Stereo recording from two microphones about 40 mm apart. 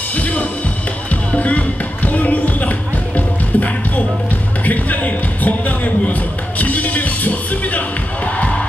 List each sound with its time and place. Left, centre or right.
0.1 s music: left
1.3 s speech: left
2.0 s a sound: left
3.2 s music: left